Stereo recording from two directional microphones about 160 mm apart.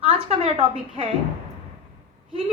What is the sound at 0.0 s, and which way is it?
A woman's voice, 35° right (ahead or behind).